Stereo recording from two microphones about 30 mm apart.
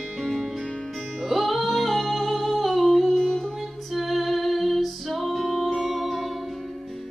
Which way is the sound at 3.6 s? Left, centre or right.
Centre.